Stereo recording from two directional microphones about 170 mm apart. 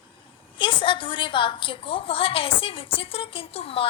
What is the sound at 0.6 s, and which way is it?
A woman's voice, 30° left (ahead or behind).